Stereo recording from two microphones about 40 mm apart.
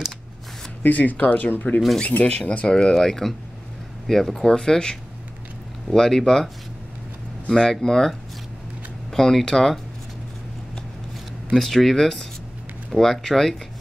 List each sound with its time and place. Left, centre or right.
0.8 s speech: left
2.7 s speech: centre
7.4 s speech: centre
9.1 s speech: centre
11.5 s speech: centre